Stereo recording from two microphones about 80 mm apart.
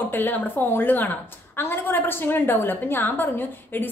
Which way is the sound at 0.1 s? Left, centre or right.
Left.